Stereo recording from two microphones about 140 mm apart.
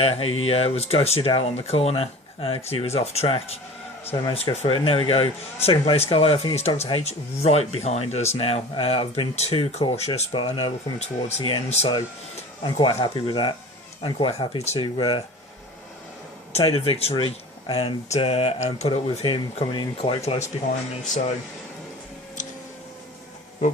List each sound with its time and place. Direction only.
0.0 s speech: 45° left (ahead or behind)
10.3 s speech: 35° left (ahead or behind)
11.0 s speech: 50° left (ahead or behind)
14.9 s speech: 35° left (ahead or behind)
16.5 s speech: 45° left (ahead or behind)
21.0 s speech: 60° left (ahead or behind)